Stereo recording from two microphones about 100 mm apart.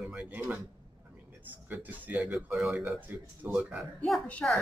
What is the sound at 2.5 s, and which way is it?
Speech, 5° right (ahead or behind).